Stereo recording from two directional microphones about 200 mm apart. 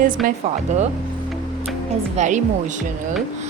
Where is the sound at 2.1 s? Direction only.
35° right (ahead or behind).